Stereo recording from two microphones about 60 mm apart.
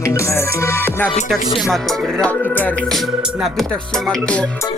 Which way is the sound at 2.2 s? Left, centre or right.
Centre.